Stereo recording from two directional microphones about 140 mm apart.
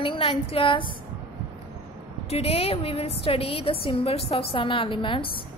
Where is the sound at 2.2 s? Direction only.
45° left (ahead or behind).